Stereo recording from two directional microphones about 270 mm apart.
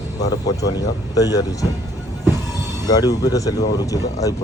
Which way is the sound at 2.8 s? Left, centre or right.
Centre.